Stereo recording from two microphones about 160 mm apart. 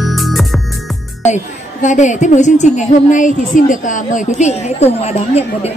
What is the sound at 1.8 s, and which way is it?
A woman's voice, 50° left (ahead or behind).